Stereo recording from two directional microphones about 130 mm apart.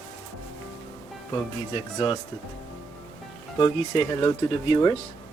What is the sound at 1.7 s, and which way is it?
Speech, 40° left (ahead or behind).